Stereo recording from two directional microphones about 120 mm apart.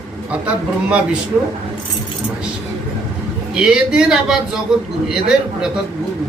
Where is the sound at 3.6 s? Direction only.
5° right (ahead or behind).